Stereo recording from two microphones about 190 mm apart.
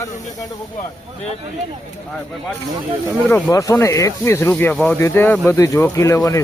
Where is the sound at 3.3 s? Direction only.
15° left (ahead or behind).